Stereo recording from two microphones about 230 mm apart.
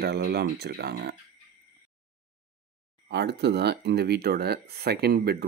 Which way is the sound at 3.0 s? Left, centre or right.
Right.